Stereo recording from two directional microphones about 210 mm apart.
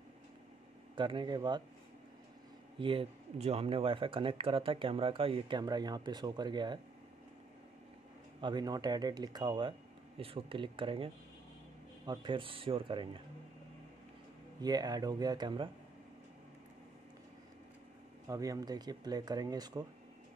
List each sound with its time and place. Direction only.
0.9 s speech: 20° right (ahead or behind)
2.8 s speech: 25° right (ahead or behind)
8.4 s speech: 20° right (ahead or behind)
12.1 s speech: 25° right (ahead or behind)
14.6 s speech: 20° right (ahead or behind)
18.3 s speech: 15° right (ahead or behind)